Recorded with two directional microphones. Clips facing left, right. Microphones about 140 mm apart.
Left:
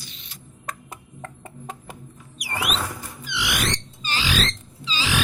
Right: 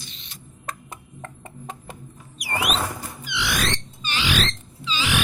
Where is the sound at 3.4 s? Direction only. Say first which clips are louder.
Right 1 dB; 15° left (ahead or behind).